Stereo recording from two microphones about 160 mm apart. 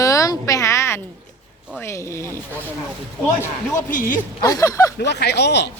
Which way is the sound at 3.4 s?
15° left (ahead or behind).